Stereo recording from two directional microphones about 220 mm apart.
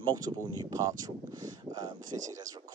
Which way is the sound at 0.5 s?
15° right (ahead or behind).